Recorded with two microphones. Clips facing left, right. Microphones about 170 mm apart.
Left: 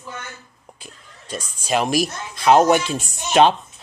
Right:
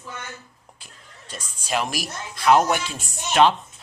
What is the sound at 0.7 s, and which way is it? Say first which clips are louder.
Speech: left 5 dB; 15° left (ahead or behind).